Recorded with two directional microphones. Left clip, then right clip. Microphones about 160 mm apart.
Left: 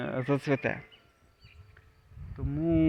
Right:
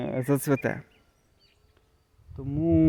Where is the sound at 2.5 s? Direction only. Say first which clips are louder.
Right 4 dB; 70° right (ahead or behind).